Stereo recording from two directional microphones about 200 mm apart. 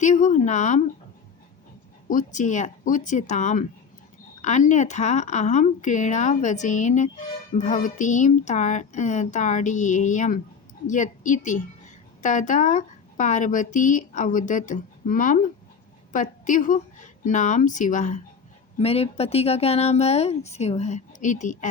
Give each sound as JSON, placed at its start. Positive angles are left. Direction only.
{"t": 0.0, "sound": "a woman's voice", "side_deg": 35}
{"t": 2.0, "sound": "a woman's voice", "side_deg": 40}